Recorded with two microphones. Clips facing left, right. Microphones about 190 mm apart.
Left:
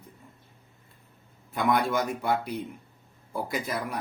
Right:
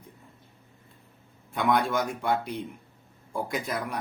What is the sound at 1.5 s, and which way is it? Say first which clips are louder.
Speech: even; centre (ahead or behind).